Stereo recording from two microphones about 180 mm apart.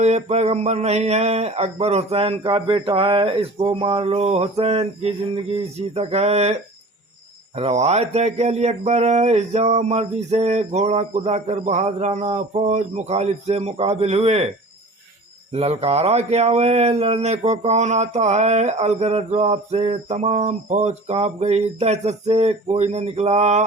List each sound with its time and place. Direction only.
0.0 s speech: 40° right (ahead or behind)
15.5 s speech: 35° right (ahead or behind)